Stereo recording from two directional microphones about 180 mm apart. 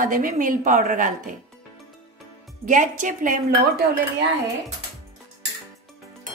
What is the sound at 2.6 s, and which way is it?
Speech, 45° right (ahead or behind).